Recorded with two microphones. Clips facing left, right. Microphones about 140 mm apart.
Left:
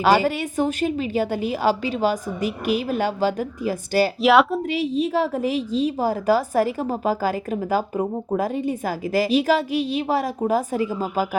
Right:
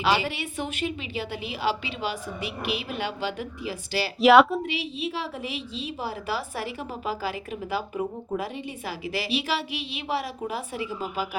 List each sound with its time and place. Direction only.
0.0 s a woman's voice: 45° left (ahead or behind)
4.2 s speech: centre (ahead or behind)
4.7 s a woman's voice: 40° left (ahead or behind)